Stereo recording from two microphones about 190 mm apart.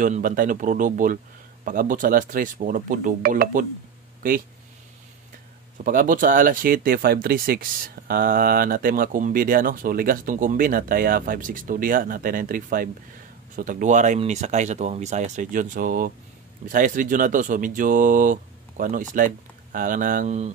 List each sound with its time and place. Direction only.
0.0 s speech: 45° right (ahead or behind)
5.9 s speech: 45° right (ahead or behind)